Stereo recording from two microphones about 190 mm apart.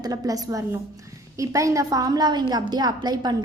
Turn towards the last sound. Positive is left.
turn(degrees=-20)  # may be behind; listen again after turning